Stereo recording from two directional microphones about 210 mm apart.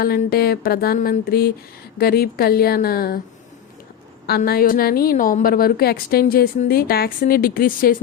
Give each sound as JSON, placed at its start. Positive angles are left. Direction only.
{"t": 0.0, "sound": "a woman's voice", "side_deg": 45}
{"t": 4.3, "sound": "a woman's voice", "side_deg": 45}